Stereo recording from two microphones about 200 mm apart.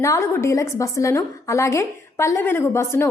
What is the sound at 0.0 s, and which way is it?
A woman's voice, 15° left (ahead or behind).